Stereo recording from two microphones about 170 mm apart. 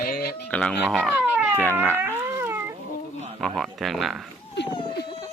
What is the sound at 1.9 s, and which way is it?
Cat, 15° right (ahead or behind).